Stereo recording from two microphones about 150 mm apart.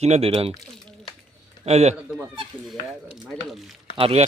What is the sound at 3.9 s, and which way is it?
Speech, 40° right (ahead or behind).